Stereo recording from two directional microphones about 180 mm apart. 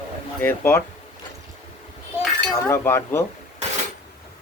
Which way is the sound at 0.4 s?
10° left (ahead or behind).